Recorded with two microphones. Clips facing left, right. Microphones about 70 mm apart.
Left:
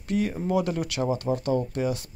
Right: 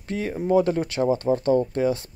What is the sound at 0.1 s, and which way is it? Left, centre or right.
Speech, right.